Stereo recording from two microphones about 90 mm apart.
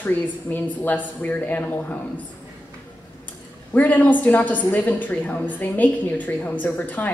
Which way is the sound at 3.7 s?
20° left (ahead or behind).